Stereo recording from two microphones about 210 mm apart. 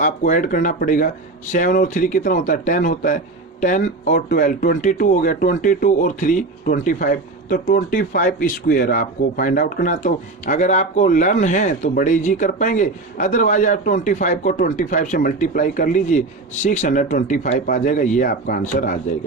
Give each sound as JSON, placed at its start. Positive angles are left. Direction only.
{"t": 0.0, "sound": "speech", "side_deg": 40}